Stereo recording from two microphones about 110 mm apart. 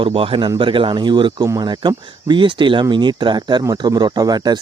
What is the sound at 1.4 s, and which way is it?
Speech, 30° right (ahead or behind).